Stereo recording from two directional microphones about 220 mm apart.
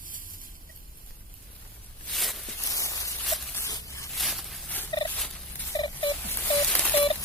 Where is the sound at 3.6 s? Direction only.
15° left (ahead or behind).